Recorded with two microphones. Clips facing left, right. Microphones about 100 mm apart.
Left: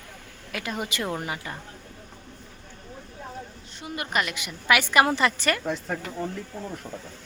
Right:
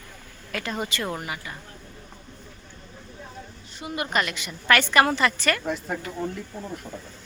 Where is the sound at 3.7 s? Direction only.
Centre (ahead or behind).